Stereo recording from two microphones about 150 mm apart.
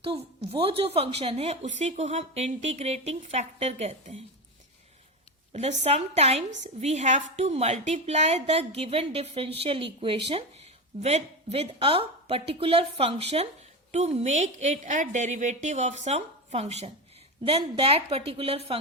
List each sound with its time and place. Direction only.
0.6 s a woman's voice: 40° right (ahead or behind)
5.5 s a woman's voice: 45° right (ahead or behind)